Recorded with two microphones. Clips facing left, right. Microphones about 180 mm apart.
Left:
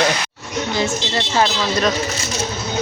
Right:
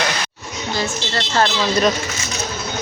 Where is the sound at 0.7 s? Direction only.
15° left (ahead or behind).